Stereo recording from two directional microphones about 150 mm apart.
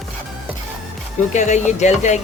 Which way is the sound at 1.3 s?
50° left (ahead or behind).